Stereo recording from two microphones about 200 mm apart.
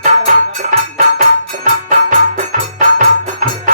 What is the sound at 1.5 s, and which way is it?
Music, 40° right (ahead or behind).